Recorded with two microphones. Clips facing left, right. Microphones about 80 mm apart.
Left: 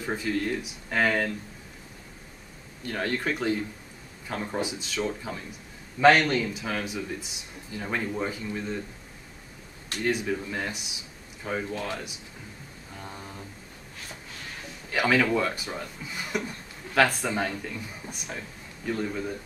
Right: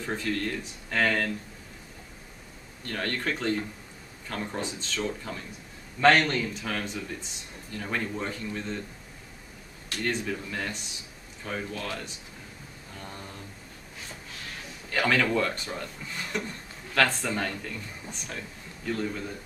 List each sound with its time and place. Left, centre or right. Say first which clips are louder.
0.0 s a man's voice: left 2 dB; centre
2.8 s a man's voice: left 2 dB; centre
10.0 s a man's voice: left 3 dB; centre
12.9 s a sound: left 1 dB; centre
14.5 s a man's voice: left 1 dB; centre